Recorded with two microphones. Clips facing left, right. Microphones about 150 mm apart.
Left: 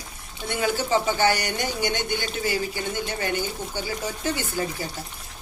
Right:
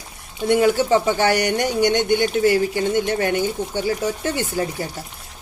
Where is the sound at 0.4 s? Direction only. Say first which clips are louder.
Right 9 dB; 70° right (ahead or behind).